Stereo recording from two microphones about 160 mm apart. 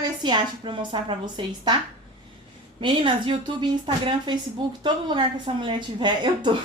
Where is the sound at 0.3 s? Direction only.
30° right (ahead or behind).